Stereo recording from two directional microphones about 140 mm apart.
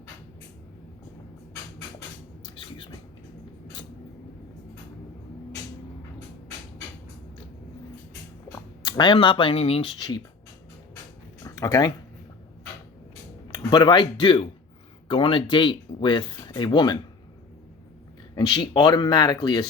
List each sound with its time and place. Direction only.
2.4 s a sound: 35° left (ahead or behind)
8.5 s speech: 30° left (ahead or behind)
10.0 s speech: 30° left (ahead or behind)
11.4 s a sound: 25° left (ahead or behind)
13.5 s speech: 35° left (ahead or behind)
18.3 s speech: 35° left (ahead or behind)